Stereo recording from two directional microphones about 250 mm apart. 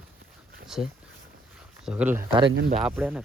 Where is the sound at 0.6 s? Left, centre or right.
Centre.